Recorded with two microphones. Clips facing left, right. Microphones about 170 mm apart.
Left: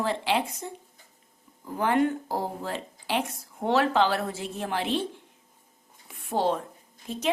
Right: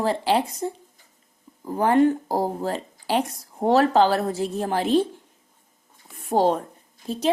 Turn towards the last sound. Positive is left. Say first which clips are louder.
# right 5 dB
turn(degrees=-35)  # may be behind; listen again after turning